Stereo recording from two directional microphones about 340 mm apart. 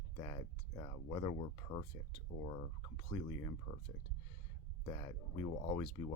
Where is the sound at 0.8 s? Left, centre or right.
Centre.